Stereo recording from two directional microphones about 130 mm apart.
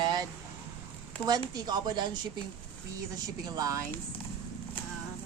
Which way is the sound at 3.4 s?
30° right (ahead or behind).